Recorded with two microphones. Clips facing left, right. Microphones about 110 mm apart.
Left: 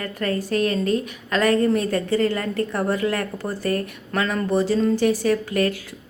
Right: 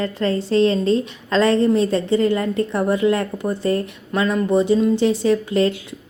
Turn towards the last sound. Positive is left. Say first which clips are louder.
# right 3 dB
turn(degrees=-25)  # may be behind; listen again after turning